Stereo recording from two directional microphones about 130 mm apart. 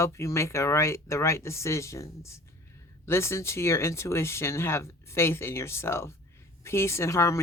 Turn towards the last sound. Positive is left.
turn(degrees=25)  # may be behind; listen again after turning